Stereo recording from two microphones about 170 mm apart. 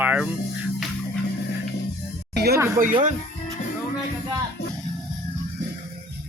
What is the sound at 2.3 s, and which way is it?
Speech, 70° right (ahead or behind).